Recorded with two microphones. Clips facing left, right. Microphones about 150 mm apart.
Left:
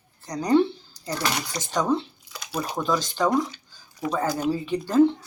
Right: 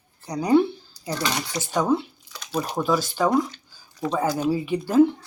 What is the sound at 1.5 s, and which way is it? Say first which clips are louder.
Speech: right 3 dB; 10° right (ahead or behind).